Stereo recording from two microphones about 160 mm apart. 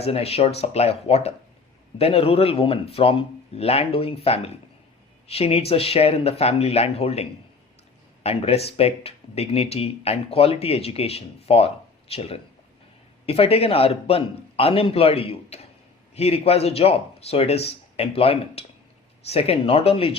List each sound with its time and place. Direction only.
0.0 s speech: 40° left (ahead or behind)